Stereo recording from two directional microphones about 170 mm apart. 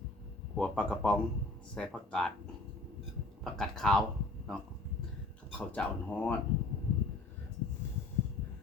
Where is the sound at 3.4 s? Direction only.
Centre (ahead or behind).